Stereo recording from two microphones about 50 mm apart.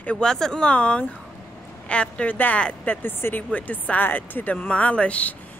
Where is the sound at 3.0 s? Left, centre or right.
Left.